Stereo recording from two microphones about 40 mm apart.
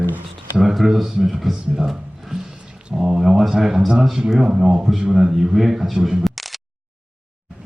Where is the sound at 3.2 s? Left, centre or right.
Centre.